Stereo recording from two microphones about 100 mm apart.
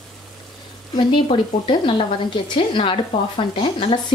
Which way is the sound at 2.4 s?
60° left (ahead or behind).